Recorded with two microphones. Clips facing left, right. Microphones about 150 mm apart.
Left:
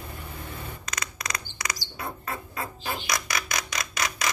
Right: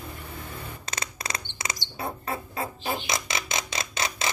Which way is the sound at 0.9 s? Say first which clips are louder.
Right 1 dB; 30° right (ahead or behind).